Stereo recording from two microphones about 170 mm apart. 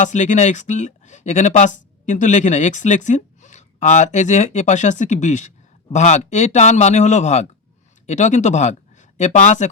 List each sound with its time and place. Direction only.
0.0 s speech: 45° left (ahead or behind)